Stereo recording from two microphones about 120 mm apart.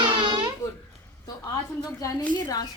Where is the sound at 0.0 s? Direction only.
40° right (ahead or behind).